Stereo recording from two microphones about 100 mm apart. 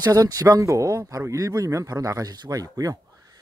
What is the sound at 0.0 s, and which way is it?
Speech, 40° right (ahead or behind).